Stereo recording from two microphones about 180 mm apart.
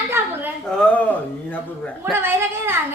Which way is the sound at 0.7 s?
10° left (ahead or behind).